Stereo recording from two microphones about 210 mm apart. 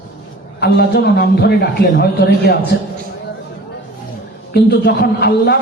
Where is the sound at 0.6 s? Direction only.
50° left (ahead or behind).